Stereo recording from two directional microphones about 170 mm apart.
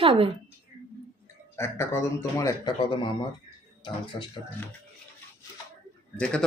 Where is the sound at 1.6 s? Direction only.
15° left (ahead or behind).